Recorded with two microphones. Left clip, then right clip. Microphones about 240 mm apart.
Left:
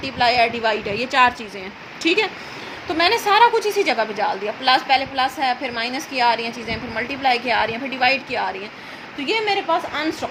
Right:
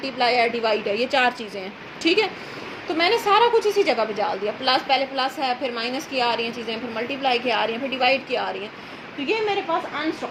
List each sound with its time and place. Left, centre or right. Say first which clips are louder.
0.2 s a woman's voice: left 3 dB; left